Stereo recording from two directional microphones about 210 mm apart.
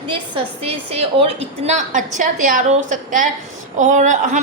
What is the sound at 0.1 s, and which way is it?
A woman's voice, 25° right (ahead or behind).